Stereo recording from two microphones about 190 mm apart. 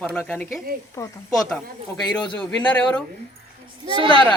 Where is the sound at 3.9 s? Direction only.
25° right (ahead or behind).